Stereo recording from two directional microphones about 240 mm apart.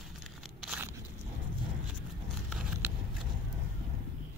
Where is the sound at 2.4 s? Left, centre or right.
Centre.